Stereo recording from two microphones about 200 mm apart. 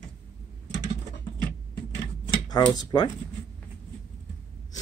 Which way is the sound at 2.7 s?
20° left (ahead or behind).